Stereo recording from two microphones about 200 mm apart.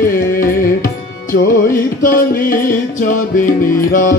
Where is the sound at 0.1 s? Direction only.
45° left (ahead or behind).